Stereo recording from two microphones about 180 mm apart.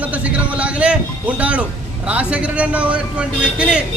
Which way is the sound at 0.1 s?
5° right (ahead or behind).